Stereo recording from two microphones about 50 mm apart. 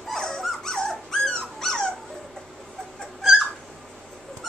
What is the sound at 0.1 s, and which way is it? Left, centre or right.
Dog, centre.